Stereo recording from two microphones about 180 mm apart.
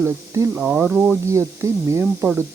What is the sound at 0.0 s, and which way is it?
Speech, 10° right (ahead or behind).